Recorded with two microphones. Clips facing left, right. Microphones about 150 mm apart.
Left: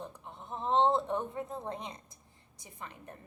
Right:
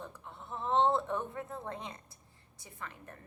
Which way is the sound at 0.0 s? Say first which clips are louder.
Left 2 dB; 15° left (ahead or behind).